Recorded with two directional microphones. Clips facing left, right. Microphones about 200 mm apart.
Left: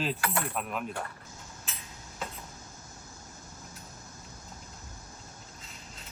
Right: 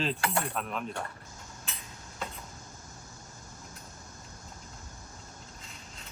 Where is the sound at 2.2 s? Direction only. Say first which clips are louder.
Even; centre (ahead or behind).